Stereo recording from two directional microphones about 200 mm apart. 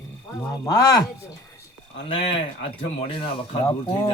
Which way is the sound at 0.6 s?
15° left (ahead or behind).